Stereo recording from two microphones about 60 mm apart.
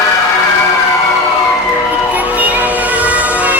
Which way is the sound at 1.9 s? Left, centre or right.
Right.